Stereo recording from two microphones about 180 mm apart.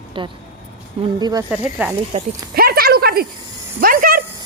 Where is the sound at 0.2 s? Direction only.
30° right (ahead or behind).